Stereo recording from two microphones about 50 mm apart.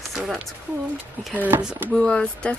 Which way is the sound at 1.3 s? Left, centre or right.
Right.